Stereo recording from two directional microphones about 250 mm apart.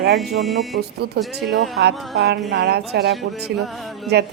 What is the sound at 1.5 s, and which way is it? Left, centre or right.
A woman's voice, right.